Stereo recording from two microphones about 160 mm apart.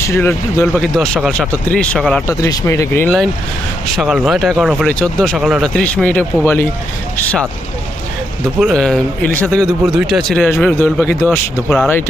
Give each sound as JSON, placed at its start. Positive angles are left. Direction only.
{"t": 0.0, "sound": "a man's voice", "side_deg": 15}
{"t": 0.8, "sound": "speech", "side_deg": 5}
{"t": 2.2, "sound": "speech", "side_deg": 20}
{"t": 3.9, "sound": "a man's voice", "side_deg": 0}
{"t": 5.7, "sound": "a man's voice", "side_deg": 10}
{"t": 8.7, "sound": "a man's voice", "side_deg": 5}